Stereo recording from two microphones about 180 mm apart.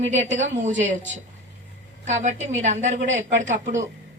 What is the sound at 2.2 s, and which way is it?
A woman's voice, 40° right (ahead or behind).